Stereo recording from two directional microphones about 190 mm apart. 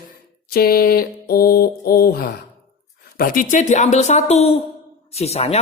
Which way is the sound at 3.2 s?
45° left (ahead or behind).